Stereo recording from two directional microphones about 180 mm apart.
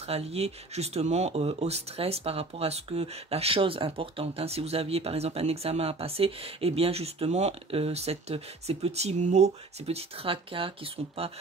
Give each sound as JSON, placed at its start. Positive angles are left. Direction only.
{"t": 0.0, "sound": "speech", "side_deg": -35}